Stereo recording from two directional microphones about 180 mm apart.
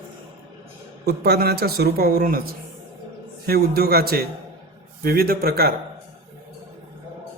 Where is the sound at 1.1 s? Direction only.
60° right (ahead or behind).